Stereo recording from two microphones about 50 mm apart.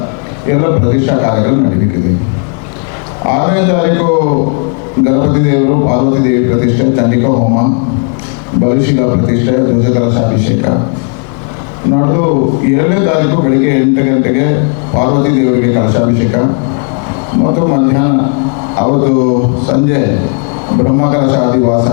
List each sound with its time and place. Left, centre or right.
0.4 s a man's voice: left
3.2 s a man's voice: left
11.9 s a man's voice: left